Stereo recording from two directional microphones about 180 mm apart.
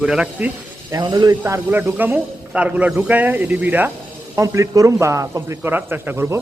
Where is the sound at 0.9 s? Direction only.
20° right (ahead or behind).